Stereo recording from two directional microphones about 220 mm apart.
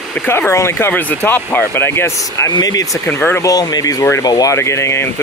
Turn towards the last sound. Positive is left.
turn(degrees=10)  # may be behind; listen again after turning